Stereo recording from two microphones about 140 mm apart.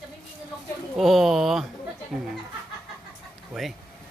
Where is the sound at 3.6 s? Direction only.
Centre (ahead or behind).